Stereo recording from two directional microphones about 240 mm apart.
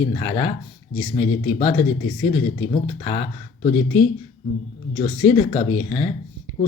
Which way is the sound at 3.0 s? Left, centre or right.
Left.